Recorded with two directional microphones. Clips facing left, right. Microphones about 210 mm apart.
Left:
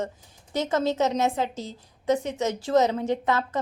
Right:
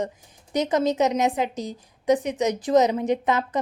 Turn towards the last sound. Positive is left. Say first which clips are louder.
# right 2 dB
turn(degrees=-15)  # may be behind; listen again after turning